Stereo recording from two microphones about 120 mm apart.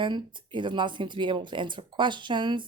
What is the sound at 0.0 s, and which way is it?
Speech, 40° right (ahead or behind).